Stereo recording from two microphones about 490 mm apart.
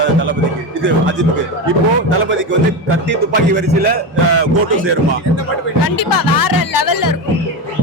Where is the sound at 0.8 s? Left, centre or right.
Right.